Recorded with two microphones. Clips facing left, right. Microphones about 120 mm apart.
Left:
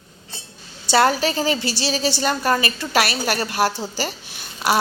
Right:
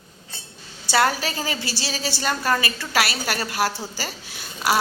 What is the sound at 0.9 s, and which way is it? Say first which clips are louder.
A woman's voice: left 4 dB; 25° left (ahead or behind).